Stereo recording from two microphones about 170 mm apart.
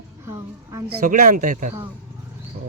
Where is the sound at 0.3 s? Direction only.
20° right (ahead or behind).